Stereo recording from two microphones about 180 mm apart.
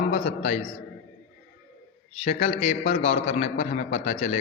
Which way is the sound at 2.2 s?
45° left (ahead or behind).